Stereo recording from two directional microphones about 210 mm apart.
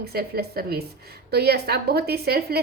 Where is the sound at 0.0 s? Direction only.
50° right (ahead or behind).